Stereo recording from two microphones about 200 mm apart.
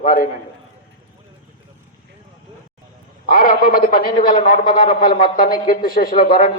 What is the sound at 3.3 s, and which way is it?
A man's voice, 45° left (ahead or behind).